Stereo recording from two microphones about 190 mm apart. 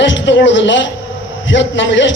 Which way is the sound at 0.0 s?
70° left (ahead or behind).